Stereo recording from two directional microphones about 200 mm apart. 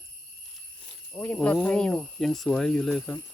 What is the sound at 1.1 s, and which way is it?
Speech, 5° left (ahead or behind).